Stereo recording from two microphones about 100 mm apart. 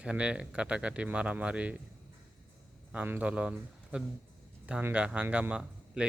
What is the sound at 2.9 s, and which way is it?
A man's voice, 15° right (ahead or behind).